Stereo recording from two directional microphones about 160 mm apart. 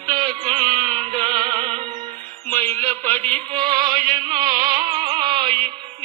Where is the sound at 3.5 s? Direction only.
30° right (ahead or behind).